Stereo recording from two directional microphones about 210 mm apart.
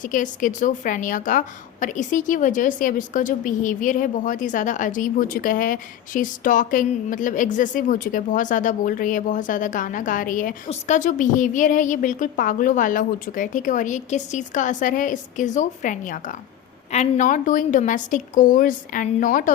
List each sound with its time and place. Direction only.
0.0 s a woman's voice: 40° left (ahead or behind)